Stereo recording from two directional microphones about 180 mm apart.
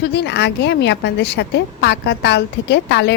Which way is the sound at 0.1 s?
70° left (ahead or behind).